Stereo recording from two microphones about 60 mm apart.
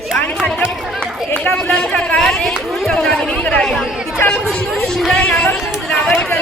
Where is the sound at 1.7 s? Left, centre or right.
Centre.